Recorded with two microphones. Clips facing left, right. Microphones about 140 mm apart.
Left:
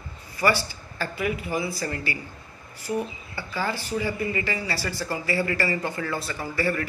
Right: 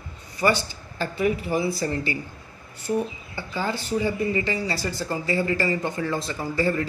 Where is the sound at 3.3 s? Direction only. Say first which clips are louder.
Even; 20° right (ahead or behind).